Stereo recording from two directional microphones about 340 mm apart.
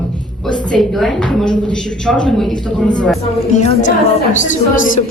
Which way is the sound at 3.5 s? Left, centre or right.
Left.